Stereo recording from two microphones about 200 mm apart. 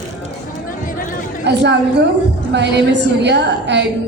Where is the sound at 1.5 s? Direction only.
60° right (ahead or behind).